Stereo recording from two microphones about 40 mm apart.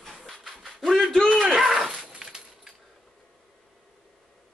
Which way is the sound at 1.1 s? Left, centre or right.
Centre.